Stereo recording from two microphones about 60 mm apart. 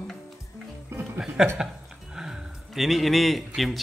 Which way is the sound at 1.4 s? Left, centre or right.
Centre.